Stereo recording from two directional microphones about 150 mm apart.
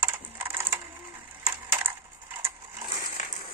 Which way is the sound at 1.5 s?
15° right (ahead or behind).